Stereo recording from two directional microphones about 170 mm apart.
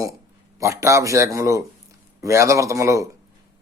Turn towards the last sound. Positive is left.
turn(degrees=-20)  # may be behind; listen again after turning